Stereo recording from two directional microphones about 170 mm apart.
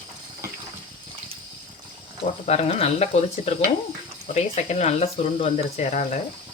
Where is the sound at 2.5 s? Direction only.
40° left (ahead or behind).